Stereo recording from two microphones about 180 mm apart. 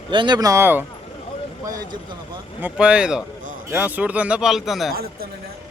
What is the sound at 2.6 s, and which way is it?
A man's voice, 5° right (ahead or behind).